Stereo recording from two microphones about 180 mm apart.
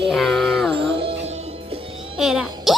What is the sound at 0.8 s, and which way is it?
Music, 30° right (ahead or behind).